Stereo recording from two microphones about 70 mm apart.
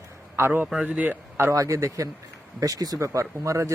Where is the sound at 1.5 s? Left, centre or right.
Right.